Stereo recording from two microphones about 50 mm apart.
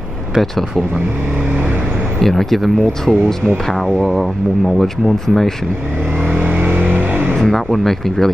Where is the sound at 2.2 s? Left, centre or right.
Centre.